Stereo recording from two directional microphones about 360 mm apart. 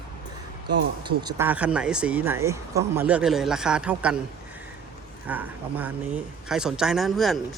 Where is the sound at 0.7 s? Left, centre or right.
Right.